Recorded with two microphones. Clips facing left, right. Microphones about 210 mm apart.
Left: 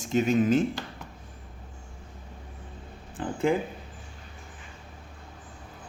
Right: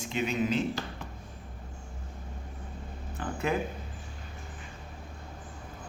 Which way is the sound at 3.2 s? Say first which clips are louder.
Left 6 dB; 30° left (ahead or behind).